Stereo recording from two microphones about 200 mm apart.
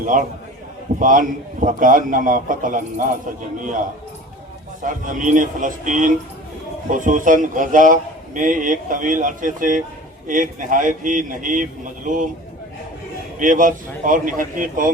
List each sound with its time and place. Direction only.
0.0 s speech: 40° right (ahead or behind)
4.8 s speech: 40° right (ahead or behind)
13.4 s speech: 40° right (ahead or behind)